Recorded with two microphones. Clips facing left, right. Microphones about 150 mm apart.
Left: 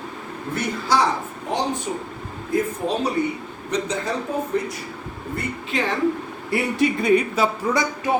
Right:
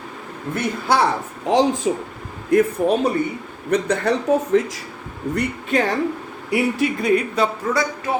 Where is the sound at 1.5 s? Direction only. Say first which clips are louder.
Right 8 dB; 90° right.